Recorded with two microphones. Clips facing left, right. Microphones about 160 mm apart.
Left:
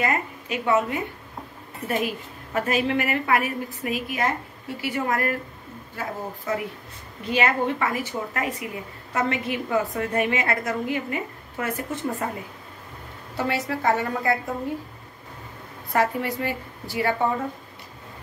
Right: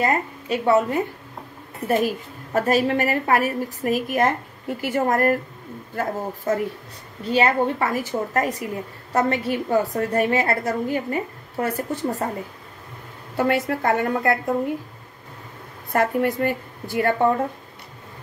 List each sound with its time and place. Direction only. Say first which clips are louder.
0.0 s a woman's voice: right 3 dB; 35° right (ahead or behind)
7.2 s a woman's voice: right 3 dB; 35° right (ahead or behind)
13.4 s a woman's voice: right 5 dB; 55° right (ahead or behind)
15.9 s a woman's voice: right 3 dB; 50° right (ahead or behind)